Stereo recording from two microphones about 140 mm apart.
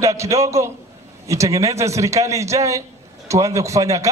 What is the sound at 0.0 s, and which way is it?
A man's voice, 20° right (ahead or behind).